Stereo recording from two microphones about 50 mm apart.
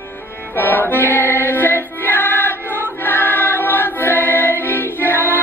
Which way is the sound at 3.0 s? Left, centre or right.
Left.